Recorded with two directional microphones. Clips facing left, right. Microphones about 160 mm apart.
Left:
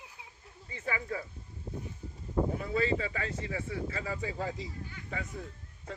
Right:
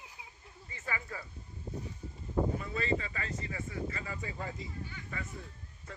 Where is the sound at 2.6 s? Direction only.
85° left.